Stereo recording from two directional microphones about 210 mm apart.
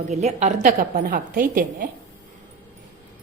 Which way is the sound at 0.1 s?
35° right (ahead or behind).